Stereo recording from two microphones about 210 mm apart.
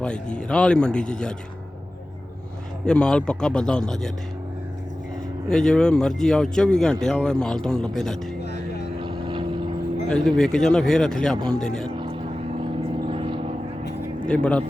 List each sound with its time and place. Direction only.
0.0 s speech: 5° left (ahead or behind)
2.8 s speech: 5° left (ahead or behind)
5.5 s speech: 5° left (ahead or behind)
9.0 s vehicle: 25° right (ahead or behind)
10.1 s speech: 5° left (ahead or behind)
11.9 s vehicle: 25° right (ahead or behind)
14.3 s speech: 5° left (ahead or behind)